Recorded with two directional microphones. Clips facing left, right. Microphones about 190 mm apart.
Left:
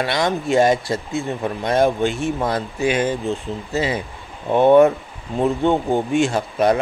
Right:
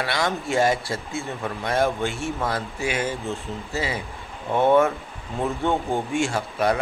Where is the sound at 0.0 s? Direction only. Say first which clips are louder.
Left 5 dB; 20° left (ahead or behind).